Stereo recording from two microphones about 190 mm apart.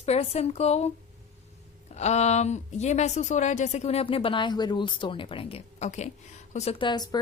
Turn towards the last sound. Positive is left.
turn(degrees=20)  # may be behind; listen again after turning